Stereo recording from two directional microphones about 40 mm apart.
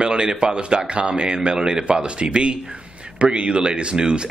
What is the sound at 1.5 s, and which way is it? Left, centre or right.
A man's voice, centre.